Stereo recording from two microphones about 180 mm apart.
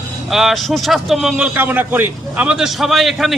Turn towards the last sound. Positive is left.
turn(degrees=0)  # may be behind; listen again after turning